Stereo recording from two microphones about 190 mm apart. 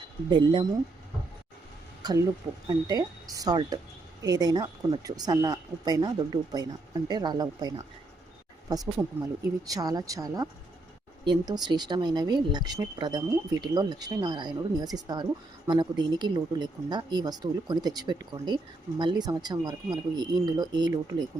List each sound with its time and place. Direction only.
0.3 s speech: 25° right (ahead or behind)
2.0 s a sound: 20° right (ahead or behind)
2.6 s speech: 20° right (ahead or behind)